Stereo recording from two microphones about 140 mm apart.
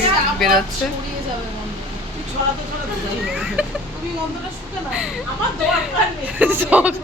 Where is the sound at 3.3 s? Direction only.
5° right (ahead or behind).